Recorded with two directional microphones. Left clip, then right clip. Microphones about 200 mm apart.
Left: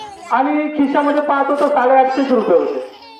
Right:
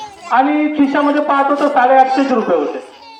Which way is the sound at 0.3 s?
30° right (ahead or behind).